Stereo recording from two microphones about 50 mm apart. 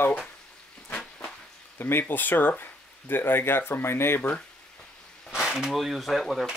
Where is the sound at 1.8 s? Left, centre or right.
Left.